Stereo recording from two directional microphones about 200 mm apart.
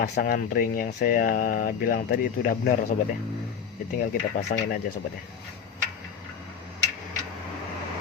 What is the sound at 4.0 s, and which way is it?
Speech, 45° left (ahead or behind).